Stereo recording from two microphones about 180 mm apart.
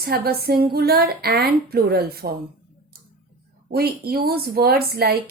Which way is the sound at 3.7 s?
60° right (ahead or behind).